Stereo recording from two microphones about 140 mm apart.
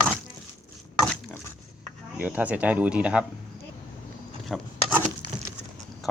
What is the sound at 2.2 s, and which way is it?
Speech, 10° right (ahead or behind).